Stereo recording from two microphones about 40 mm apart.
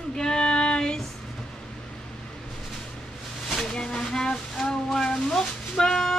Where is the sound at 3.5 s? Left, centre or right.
Centre.